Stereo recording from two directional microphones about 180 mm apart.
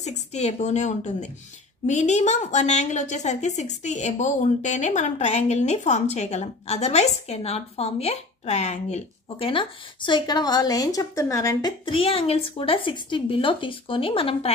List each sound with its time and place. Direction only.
0.0 s a woman's voice: 40° left (ahead or behind)